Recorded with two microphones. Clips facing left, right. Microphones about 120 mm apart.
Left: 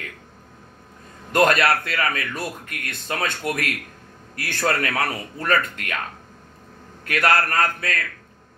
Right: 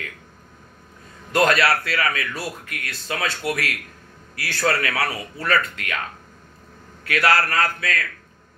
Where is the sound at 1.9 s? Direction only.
45° left (ahead or behind).